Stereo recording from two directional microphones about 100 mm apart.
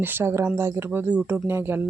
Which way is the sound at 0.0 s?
20° right (ahead or behind).